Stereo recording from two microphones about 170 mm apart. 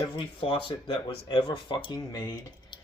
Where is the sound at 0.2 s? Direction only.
30° left (ahead or behind).